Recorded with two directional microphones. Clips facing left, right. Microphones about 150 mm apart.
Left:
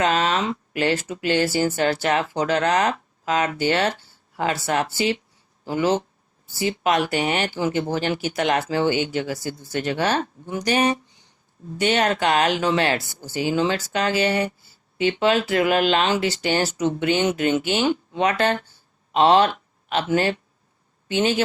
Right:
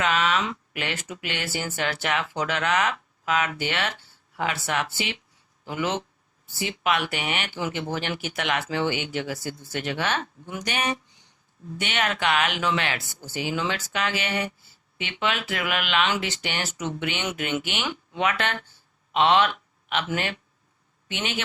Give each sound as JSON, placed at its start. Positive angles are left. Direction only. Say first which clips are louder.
{"t": 0.0, "sound": "speech", "louder": "left 3 dB", "side_deg": 35}